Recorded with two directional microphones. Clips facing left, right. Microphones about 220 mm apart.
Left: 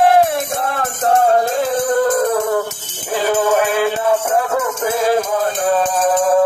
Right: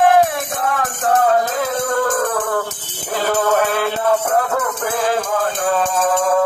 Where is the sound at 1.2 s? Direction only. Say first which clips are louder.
Left 2 dB; 30° left (ahead or behind).